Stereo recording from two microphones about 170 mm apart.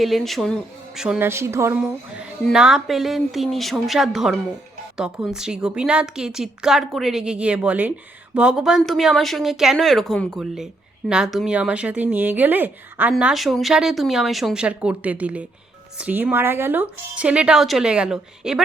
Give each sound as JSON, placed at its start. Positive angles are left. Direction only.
{"t": 0.0, "sound": "a woman's voice", "side_deg": 0}
{"t": 1.3, "sound": "speech", "side_deg": -15}
{"t": 1.8, "sound": "a woman's voice", "side_deg": -5}